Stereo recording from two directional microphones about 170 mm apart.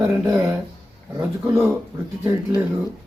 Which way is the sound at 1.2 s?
15° right (ahead or behind).